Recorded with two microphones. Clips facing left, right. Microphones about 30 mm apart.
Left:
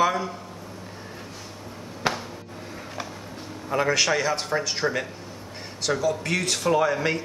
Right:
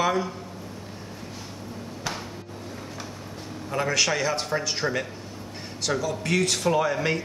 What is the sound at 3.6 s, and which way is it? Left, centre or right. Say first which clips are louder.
A man's voice: left 2 dB; centre.